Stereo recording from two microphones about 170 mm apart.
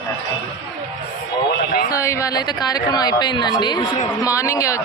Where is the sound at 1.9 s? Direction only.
15° left (ahead or behind).